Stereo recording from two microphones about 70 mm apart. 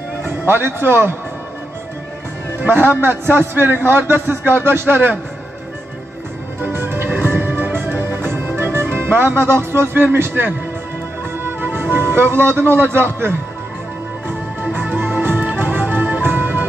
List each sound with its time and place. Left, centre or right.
0.2 s a man's voice: right
2.6 s a man's voice: right
6.6 s music: right
11.4 s a man's voice: right
14.2 s music: right